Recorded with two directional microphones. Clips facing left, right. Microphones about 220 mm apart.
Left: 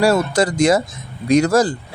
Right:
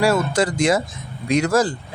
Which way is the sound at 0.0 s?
40° left (ahead or behind).